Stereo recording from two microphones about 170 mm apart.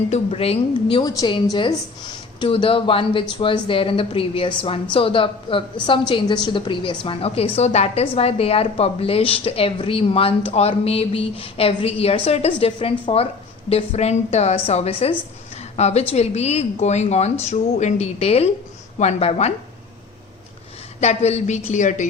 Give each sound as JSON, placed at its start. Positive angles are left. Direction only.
{"t": 0.1, "sound": "a woman's voice", "side_deg": 35}
{"t": 2.4, "sound": "a woman's voice", "side_deg": 30}
{"t": 21.0, "sound": "a woman's voice", "side_deg": 40}